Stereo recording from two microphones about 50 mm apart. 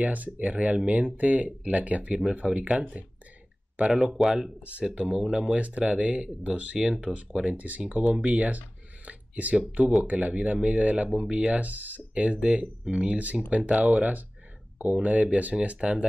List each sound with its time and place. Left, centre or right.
0.0 s speech: right
3.8 s speech: centre
7.5 s speech: right